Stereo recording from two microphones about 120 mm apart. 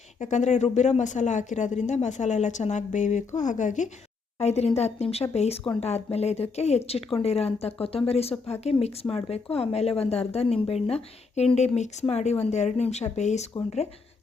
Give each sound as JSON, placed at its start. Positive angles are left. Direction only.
{"t": 0.2, "sound": "speech", "side_deg": 90}
{"t": 4.4, "sound": "a woman's voice", "side_deg": 65}